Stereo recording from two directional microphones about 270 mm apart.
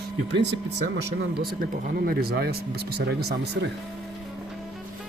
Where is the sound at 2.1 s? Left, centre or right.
Right.